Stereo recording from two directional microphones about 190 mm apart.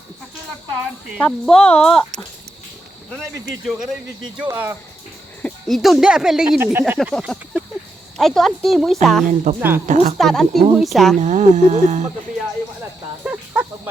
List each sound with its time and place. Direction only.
1.2 s speech: 5° left (ahead or behind)
3.7 s speech: centre (ahead or behind)
5.4 s speech: 5° left (ahead or behind)
9.2 s speech: 40° right (ahead or behind)
9.6 s speech: 10° right (ahead or behind)
9.8 s speech: 40° right (ahead or behind)
10.2 s speech: centre (ahead or behind)
11.2 s speech: 40° right (ahead or behind)
13.2 s a sound: 10° right (ahead or behind)